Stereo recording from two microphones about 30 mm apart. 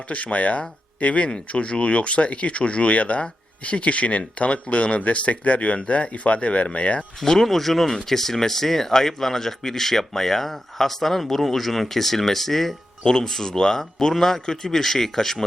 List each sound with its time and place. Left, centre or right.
0.1 s speech: left
7.3 s speech: centre
13.1 s speech: centre